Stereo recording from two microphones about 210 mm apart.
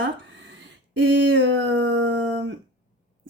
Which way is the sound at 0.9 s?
60° right (ahead or behind).